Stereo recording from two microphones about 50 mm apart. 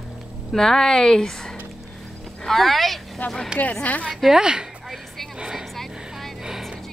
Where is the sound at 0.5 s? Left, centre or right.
Centre.